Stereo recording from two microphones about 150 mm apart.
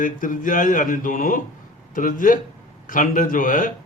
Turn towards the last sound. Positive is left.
turn(degrees=65)  # may be behind; listen again after turning